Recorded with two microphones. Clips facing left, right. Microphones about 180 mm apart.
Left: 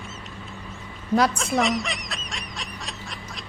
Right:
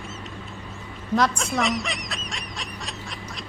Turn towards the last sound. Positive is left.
turn(degrees=0)  # may be behind; listen again after turning